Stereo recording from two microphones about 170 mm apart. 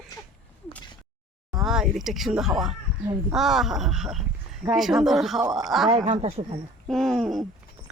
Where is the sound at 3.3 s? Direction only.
Centre (ahead or behind).